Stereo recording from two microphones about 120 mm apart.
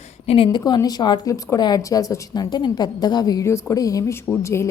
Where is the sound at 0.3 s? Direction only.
45° left (ahead or behind).